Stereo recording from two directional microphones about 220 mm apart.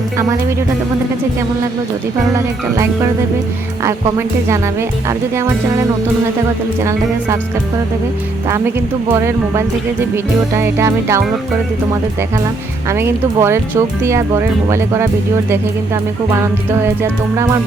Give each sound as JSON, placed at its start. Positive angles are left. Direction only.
{"t": 2.3, "sound": "speech", "side_deg": -15}
{"t": 9.2, "sound": "speech", "side_deg": -10}
{"t": 12.9, "sound": "speech", "side_deg": -10}
{"t": 16.3, "sound": "speech", "side_deg": -10}